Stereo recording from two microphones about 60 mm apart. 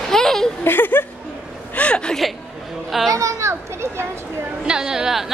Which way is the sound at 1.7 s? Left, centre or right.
Centre.